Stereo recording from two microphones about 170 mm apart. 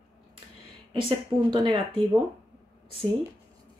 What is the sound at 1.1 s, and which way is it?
Speech, 30° right (ahead or behind).